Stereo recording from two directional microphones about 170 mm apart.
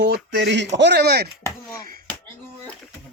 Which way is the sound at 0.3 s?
90° right.